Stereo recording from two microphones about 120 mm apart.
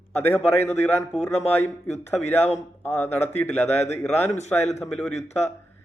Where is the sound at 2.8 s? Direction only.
20° left (ahead or behind).